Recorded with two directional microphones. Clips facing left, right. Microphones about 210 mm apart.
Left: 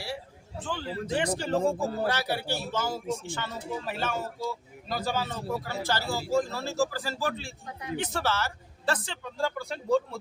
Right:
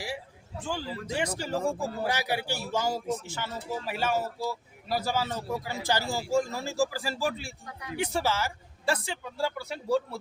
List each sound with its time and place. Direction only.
0.6 s speech: 10° right (ahead or behind)
7.7 s a man's voice: 25° left (ahead or behind)
7.9 s speech: 10° right (ahead or behind)